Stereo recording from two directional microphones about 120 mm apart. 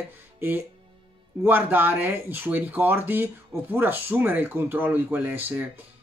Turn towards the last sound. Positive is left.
turn(degrees=-15)  # may be behind; listen again after turning